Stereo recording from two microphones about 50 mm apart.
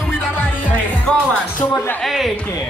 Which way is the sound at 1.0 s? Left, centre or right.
Left.